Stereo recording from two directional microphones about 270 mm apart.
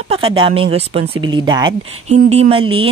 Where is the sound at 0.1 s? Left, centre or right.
Centre.